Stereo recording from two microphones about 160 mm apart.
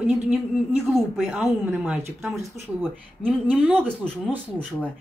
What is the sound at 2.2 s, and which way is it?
Speech, 20° right (ahead or behind).